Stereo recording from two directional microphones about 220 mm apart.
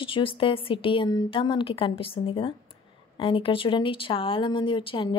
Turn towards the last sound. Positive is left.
turn(degrees=25)  # may be behind; listen again after turning